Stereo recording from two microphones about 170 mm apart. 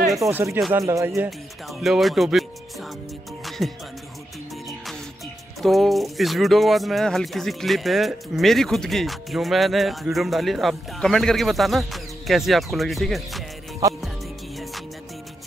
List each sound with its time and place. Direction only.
0.2 s speech: 15° right (ahead or behind)
1.7 s speech: centre (ahead or behind)
3.4 s music: centre (ahead or behind)
5.6 s speech: centre (ahead or behind)